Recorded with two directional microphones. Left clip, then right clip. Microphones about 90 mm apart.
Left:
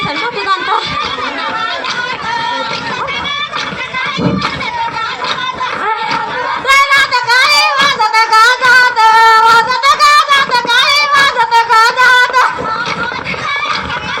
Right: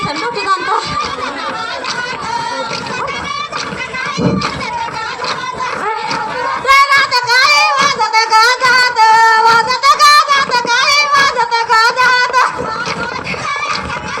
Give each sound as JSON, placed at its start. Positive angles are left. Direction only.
{"t": 0.4, "sound": "speech", "side_deg": -40}
{"t": 6.7, "sound": "child singing", "side_deg": -30}